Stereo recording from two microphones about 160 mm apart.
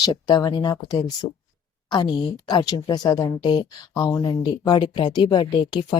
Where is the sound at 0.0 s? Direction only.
25° left (ahead or behind).